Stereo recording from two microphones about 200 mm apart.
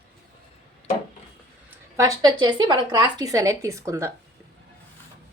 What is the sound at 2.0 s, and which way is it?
Speech, 20° right (ahead or behind).